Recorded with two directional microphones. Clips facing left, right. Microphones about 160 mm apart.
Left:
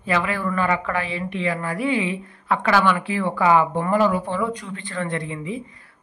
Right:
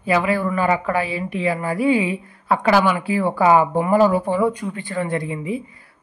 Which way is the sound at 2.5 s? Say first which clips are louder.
Right 3 dB; 35° right (ahead or behind).